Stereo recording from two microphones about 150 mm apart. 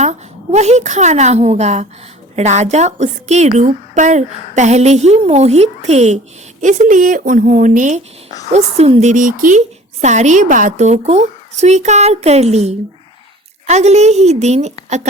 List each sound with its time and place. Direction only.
0.0 s a woman's voice: 50° right (ahead or behind)
8.4 s a woman's voice: 45° right (ahead or behind)